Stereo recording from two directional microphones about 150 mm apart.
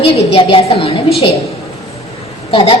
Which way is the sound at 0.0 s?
35° left (ahead or behind).